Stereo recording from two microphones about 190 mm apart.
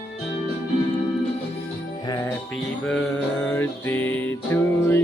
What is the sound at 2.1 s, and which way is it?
Music, 20° left (ahead or behind).